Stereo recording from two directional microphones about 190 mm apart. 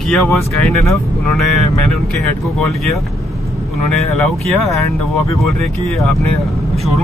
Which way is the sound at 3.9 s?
Centre (ahead or behind).